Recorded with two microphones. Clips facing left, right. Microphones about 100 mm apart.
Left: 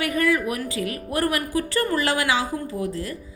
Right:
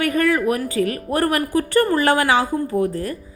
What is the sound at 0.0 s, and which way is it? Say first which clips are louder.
A woman's voice: right 4 dB; 50° right (ahead or behind).